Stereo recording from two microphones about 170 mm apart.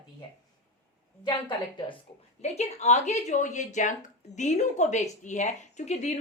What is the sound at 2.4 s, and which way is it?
Speech, 40° left (ahead or behind).